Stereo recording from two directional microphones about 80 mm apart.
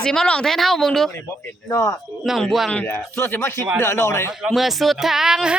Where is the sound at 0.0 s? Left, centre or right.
Centre.